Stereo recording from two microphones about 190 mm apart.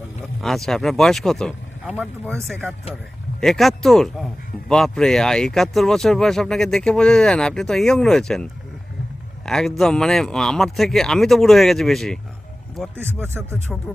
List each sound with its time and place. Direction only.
0.4 s speech: centre (ahead or behind)
3.4 s speech: centre (ahead or behind)
9.5 s speech: centre (ahead or behind)
13.1 s speech: 10° right (ahead or behind)